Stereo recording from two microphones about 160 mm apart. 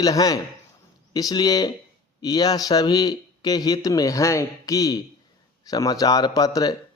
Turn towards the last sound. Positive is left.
turn(degrees=25)  # may be behind; listen again after turning